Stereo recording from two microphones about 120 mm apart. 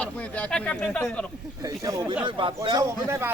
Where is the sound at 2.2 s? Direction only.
45° right (ahead or behind).